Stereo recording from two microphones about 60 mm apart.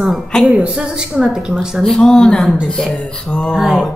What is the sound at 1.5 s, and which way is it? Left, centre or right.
A woman's voice, centre.